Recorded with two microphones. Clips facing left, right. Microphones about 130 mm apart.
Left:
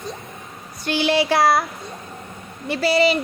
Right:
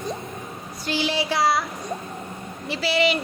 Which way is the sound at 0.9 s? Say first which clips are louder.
Left 6 dB; 65° left (ahead or behind).